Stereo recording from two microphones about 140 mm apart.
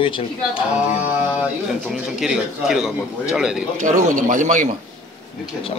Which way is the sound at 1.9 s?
5° right (ahead or behind).